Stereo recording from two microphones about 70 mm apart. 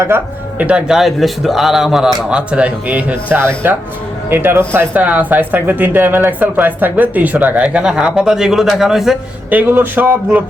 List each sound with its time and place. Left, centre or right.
0.9 s a man's voice: centre
2.5 s speech: centre
3.3 s speech: right
4.9 s speech: right; by 9.1 s centre
9.5 s speech: right